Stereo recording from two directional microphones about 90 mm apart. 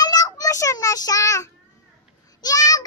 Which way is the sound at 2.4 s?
45° left (ahead or behind).